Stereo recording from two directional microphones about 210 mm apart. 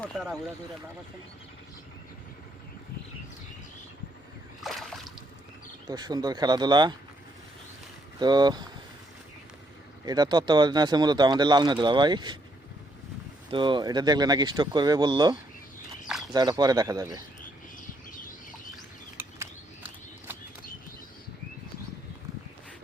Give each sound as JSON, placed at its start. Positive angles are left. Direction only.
{"t": 0.0, "sound": "speech", "side_deg": 0}
{"t": 4.6, "sound": "a sound", "side_deg": 0}
{"t": 5.9, "sound": "speech", "side_deg": -20}
{"t": 8.2, "sound": "speech", "side_deg": -20}
{"t": 10.1, "sound": "speech", "side_deg": -20}
{"t": 13.5, "sound": "speech", "side_deg": -20}
{"t": 16.0, "sound": "a sound", "side_deg": 0}
{"t": 16.3, "sound": "speech", "side_deg": -20}
{"t": 19.1, "sound": "a sound", "side_deg": -10}